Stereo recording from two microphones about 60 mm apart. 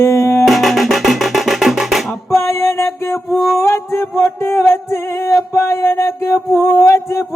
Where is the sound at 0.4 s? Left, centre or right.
Centre.